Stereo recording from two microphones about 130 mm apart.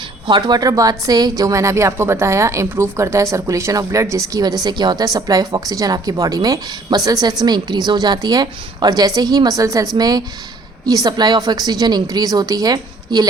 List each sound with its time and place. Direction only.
0.3 s a woman's voice: 35° right (ahead or behind)